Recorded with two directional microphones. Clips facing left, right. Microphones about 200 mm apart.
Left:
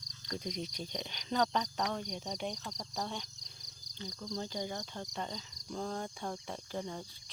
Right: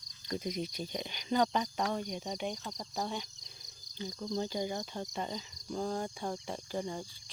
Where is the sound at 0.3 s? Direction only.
5° right (ahead or behind).